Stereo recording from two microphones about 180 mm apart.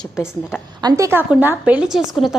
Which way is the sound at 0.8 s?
20° right (ahead or behind).